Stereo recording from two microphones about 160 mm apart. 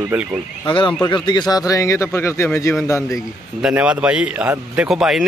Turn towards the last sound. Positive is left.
turn(degrees=0)  # may be behind; listen again after turning